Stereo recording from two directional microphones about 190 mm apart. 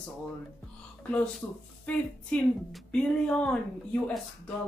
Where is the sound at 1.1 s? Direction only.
5° left (ahead or behind).